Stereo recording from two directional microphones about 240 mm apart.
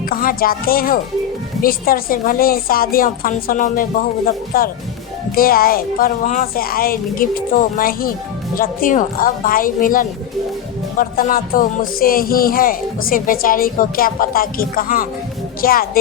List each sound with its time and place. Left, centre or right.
0.1 s speech: left